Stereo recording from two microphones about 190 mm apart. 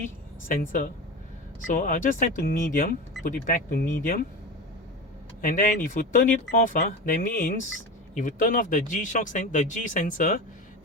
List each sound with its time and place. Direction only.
0.4 s speech: 45° left (ahead or behind)
5.4 s speech: 45° left (ahead or behind)